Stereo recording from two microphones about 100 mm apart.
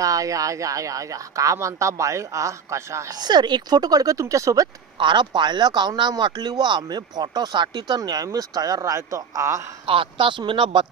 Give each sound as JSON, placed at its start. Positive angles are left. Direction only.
{"t": 0.0, "sound": "speech", "side_deg": -35}
{"t": 3.2, "sound": "speech", "side_deg": -45}
{"t": 4.9, "sound": "speech", "side_deg": -50}
{"t": 9.8, "sound": "speech", "side_deg": -60}